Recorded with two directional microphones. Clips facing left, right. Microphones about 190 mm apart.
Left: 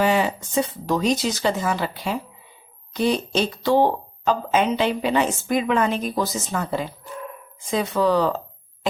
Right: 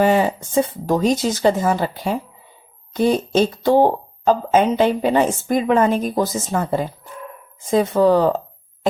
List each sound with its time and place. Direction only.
0.0 s speech: 45° right (ahead or behind)